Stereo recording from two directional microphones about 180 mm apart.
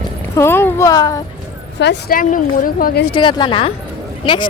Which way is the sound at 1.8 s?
65° left (ahead or behind).